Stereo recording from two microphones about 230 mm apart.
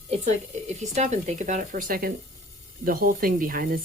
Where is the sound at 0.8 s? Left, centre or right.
Right.